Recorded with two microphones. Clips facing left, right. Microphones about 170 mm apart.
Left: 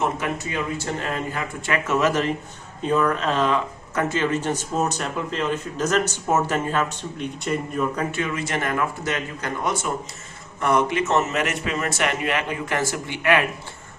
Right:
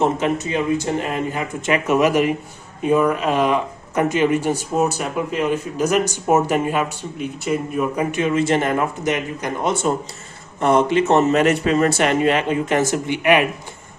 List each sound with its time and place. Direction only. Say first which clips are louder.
0.0 s speech: right 6 dB; 20° right (ahead or behind)